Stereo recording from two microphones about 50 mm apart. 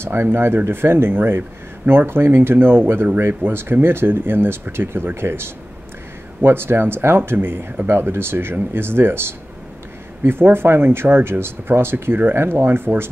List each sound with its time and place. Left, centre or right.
0.0 s speech: right